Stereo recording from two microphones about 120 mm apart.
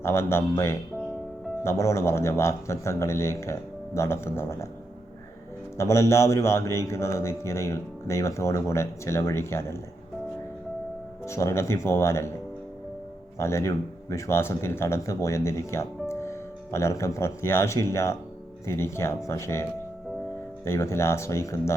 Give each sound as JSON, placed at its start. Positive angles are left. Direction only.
{"t": 0.0, "sound": "speech", "side_deg": 20}
{"t": 5.7, "sound": "speech", "side_deg": 25}
{"t": 11.3, "sound": "speech", "side_deg": 25}
{"t": 13.4, "sound": "speech", "side_deg": 25}
{"t": 20.7, "sound": "speech", "side_deg": 20}